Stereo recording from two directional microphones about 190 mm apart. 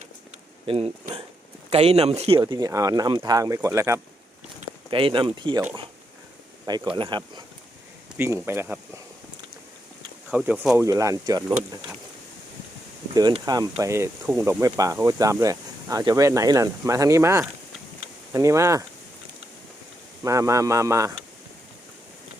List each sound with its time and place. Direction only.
0.6 s speech: 30° right (ahead or behind)
2.4 s speech: 20° right (ahead or behind)
4.9 s speech: 25° right (ahead or behind)
6.9 s speech: 25° right (ahead or behind)
8.2 s speech: 10° right (ahead or behind)
10.3 s speech: 5° right (ahead or behind)
13.1 s speech: 20° right (ahead or behind)
20.2 s speech: 15° right (ahead or behind)